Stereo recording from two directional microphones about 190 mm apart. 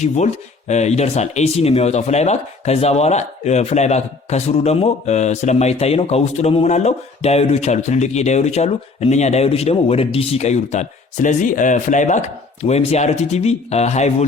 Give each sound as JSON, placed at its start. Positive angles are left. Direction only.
{"t": 0.7, "sound": "speech", "side_deg": 35}